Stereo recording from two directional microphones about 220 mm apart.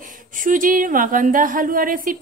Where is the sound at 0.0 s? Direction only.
35° right (ahead or behind).